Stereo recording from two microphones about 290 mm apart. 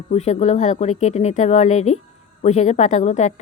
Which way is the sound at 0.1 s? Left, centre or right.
Left.